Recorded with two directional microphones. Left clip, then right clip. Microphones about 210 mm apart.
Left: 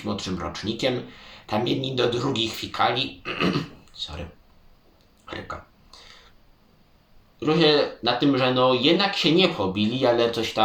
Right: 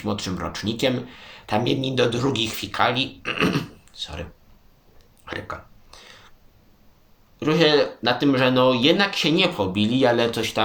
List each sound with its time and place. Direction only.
0.0 s speech: 50° right (ahead or behind)
7.3 s speech: 50° right (ahead or behind)